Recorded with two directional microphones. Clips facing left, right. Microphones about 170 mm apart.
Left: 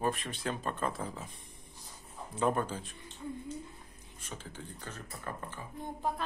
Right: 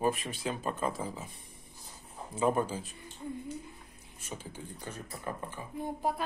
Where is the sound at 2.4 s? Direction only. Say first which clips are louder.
Right 2 dB; 5° right (ahead or behind).